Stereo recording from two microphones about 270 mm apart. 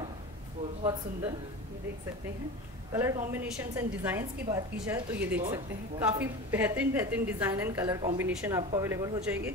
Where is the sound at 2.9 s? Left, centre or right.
Centre.